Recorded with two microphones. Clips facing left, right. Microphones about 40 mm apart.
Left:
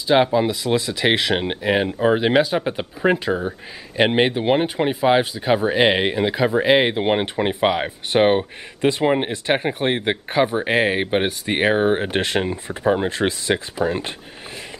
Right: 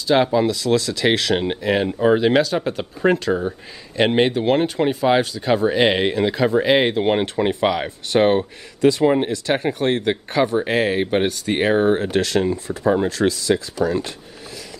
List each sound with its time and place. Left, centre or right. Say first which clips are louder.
0.0 s speech: even; centre; by 14.1 s left